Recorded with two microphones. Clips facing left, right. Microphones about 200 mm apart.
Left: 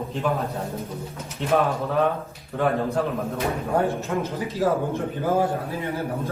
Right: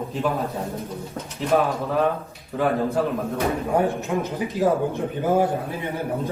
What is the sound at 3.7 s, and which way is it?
Speech, 15° right (ahead or behind).